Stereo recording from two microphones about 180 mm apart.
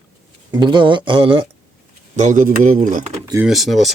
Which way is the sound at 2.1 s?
45° right (ahead or behind).